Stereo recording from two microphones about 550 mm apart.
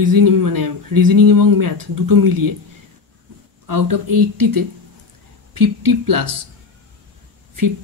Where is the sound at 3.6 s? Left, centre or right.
Right.